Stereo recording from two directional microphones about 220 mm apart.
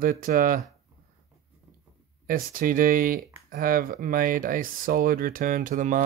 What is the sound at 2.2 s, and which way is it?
Speech, 40° right (ahead or behind).